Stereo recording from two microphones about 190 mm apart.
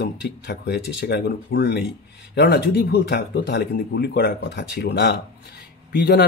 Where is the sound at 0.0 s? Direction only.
65° left (ahead or behind).